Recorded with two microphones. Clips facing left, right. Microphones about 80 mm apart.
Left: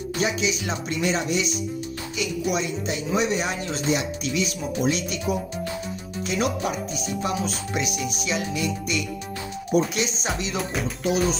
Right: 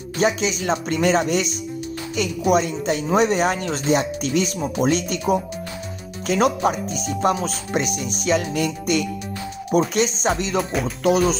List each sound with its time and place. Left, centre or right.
0.2 s speech: right
10.6 s music: centre
11.1 s speech: right